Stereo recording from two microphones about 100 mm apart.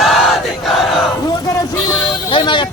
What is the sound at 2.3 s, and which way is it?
Speech, 50° left (ahead or behind).